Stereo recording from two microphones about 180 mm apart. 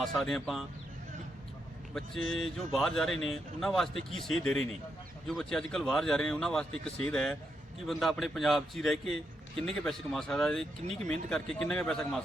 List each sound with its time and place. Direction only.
0.0 s a man's voice: centre (ahead or behind)
2.0 s a man's voice: centre (ahead or behind)